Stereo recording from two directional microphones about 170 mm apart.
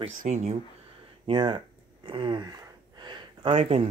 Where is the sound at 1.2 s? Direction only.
25° right (ahead or behind).